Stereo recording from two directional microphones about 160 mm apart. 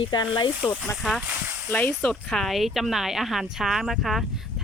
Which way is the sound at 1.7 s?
10° left (ahead or behind).